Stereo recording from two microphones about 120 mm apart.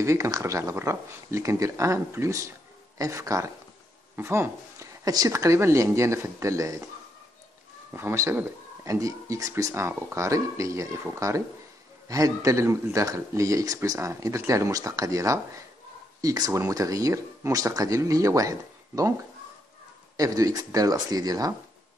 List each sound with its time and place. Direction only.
0.0 s speech: 25° right (ahead or behind)
7.9 s speech: 20° right (ahead or behind)
20.2 s speech: 30° right (ahead or behind)